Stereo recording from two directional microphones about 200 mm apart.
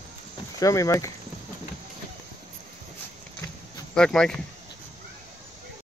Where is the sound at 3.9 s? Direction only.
5° left (ahead or behind).